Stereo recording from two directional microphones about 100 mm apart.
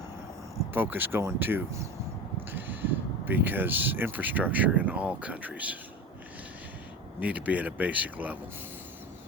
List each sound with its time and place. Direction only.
0.7 s speech: 20° right (ahead or behind)
7.2 s speech: 15° right (ahead or behind)